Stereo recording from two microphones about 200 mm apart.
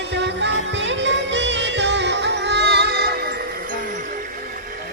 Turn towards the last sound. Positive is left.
turn(degrees=-40)  # may be behind; listen again after turning